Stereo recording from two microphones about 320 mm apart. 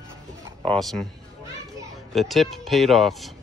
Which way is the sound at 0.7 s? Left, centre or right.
Centre.